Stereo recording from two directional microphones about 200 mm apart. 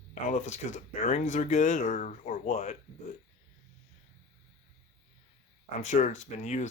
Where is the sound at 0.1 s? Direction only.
35° left (ahead or behind).